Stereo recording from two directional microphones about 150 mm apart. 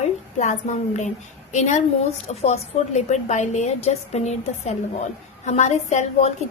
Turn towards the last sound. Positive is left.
turn(degrees=50)  # may be behind; listen again after turning